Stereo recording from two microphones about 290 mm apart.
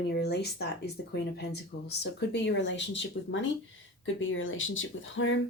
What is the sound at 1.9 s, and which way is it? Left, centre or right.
Speech, left.